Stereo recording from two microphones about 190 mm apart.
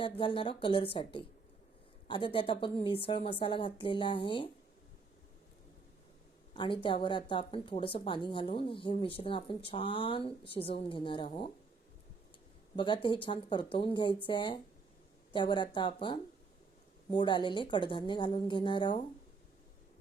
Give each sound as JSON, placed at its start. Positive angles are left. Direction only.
{"t": 0.0, "sound": "speech", "side_deg": 30}
{"t": 6.6, "sound": "speech", "side_deg": 25}
{"t": 12.7, "sound": "speech", "side_deg": 25}